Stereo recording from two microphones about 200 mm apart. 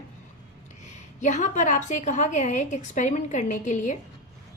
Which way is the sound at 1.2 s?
35° left (ahead or behind).